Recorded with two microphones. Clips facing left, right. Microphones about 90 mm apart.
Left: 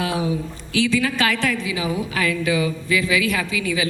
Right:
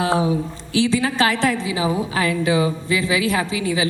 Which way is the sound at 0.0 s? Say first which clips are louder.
Right 4 dB; 35° right (ahead or behind).